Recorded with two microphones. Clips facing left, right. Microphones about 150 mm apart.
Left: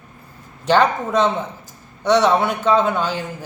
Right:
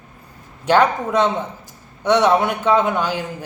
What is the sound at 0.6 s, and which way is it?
A man's voice, 10° right (ahead or behind).